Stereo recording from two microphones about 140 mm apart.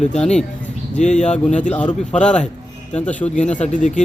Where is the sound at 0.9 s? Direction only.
55° left (ahead or behind).